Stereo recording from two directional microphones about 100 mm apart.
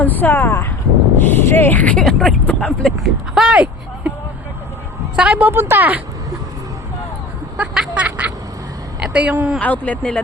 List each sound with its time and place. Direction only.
0.0 s speech: 20° left (ahead or behind)
3.0 s speech: 5° right (ahead or behind)
5.1 s a woman's voice: 15° right (ahead or behind)
7.5 s a sound: 10° right (ahead or behind)
9.0 s a woman's voice: 10° right (ahead or behind)
9.6 s speech: 15° left (ahead or behind)